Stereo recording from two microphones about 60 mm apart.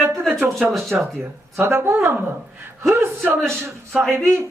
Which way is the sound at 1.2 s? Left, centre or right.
Right.